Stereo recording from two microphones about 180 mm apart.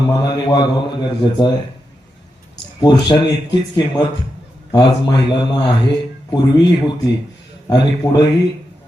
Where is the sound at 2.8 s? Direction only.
25° left (ahead or behind).